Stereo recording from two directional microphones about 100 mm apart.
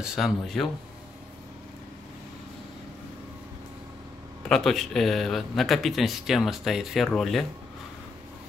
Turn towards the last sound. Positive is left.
turn(degrees=0)  # may be behind; listen again after turning